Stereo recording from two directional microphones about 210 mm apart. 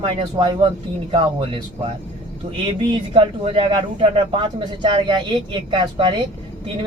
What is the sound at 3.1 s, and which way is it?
Speech, 25° right (ahead or behind).